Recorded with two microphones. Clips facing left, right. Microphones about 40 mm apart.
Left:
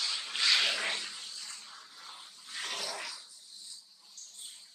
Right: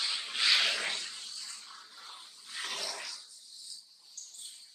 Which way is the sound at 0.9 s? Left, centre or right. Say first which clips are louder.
Left 1 dB; centre.